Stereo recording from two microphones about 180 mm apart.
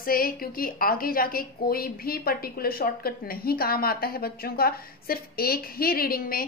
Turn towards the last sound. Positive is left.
turn(degrees=55)  # may be behind; listen again after turning